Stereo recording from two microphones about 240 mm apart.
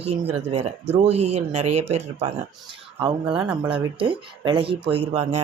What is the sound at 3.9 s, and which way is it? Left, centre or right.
Speech, right.